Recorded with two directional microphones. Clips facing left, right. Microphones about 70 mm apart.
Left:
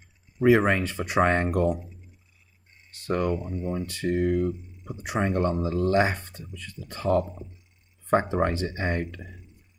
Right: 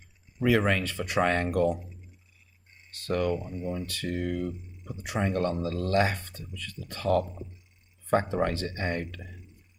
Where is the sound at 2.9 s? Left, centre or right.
Left.